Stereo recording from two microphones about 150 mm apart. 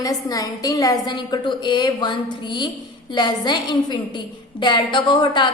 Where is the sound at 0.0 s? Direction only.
25° left (ahead or behind).